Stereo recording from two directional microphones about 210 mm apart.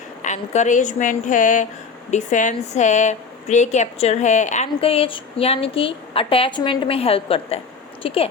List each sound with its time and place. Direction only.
0.2 s a woman's voice: 35° left (ahead or behind)